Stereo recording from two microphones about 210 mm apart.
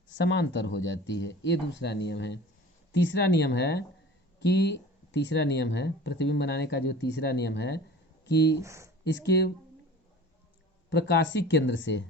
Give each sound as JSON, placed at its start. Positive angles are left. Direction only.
{"t": 0.2, "sound": "speech", "side_deg": 60}
{"t": 8.6, "sound": "speech", "side_deg": -15}
{"t": 9.0, "sound": "speech", "side_deg": 55}
{"t": 10.8, "sound": "speech", "side_deg": 55}